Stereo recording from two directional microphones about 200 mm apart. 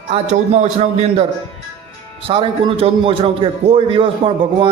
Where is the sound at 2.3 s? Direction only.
25° right (ahead or behind).